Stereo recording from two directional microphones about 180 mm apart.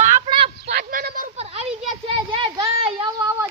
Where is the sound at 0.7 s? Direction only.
55° right (ahead or behind).